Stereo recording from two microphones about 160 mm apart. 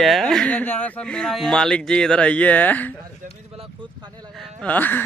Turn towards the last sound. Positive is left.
turn(degrees=10)  # may be behind; listen again after turning